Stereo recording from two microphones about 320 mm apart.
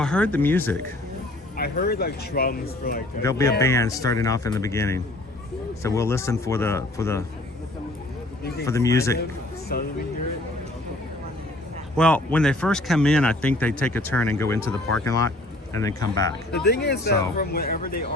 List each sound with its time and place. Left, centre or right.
0.0 s speech: centre
1.5 s speech: left
3.2 s speech: centre
8.6 s speech: centre
9.7 s speech: left
11.9 s speech: centre
14.6 s speech: right
15.0 s speech: centre
16.6 s speech: left